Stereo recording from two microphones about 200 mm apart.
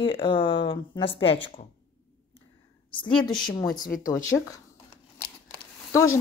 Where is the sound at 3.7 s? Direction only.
45° left (ahead or behind).